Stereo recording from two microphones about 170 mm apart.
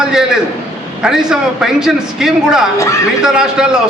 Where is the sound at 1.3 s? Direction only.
5° right (ahead or behind).